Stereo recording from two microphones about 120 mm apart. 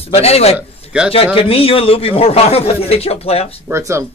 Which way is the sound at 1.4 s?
55° left (ahead or behind).